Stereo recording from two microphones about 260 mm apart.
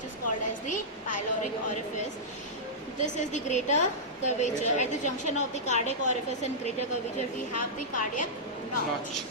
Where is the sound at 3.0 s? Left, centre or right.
Left.